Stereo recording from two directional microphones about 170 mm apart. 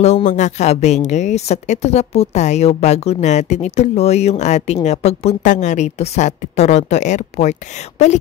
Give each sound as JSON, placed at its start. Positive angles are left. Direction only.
{"t": 0.0, "sound": "a woman's voice", "side_deg": 45}